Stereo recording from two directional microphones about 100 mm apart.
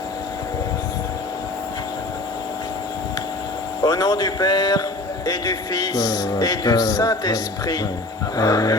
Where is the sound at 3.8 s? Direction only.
40° left (ahead or behind).